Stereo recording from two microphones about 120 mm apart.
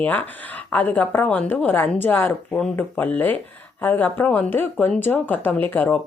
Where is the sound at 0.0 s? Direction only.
15° left (ahead or behind).